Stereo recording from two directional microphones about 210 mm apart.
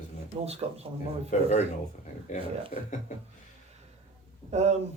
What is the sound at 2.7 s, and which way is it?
Speech, 35° left (ahead or behind).